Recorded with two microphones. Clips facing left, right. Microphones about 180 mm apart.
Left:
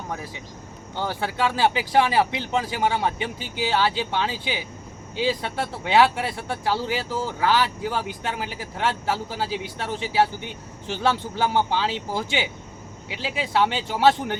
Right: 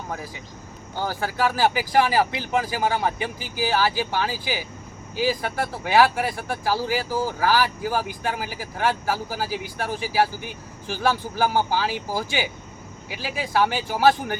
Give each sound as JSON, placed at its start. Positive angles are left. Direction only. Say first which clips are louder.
{"t": 1.1, "sound": "speech", "louder": "right 1 dB", "side_deg": 25}